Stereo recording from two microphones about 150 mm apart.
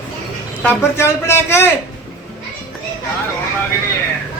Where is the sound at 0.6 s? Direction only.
15° left (ahead or behind).